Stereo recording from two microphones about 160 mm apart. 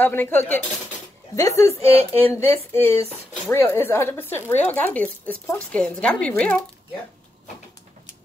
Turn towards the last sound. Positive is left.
turn(degrees=5)  # may be behind; listen again after turning